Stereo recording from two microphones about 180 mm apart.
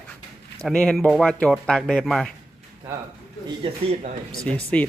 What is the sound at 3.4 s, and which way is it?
Speech, 30° right (ahead or behind).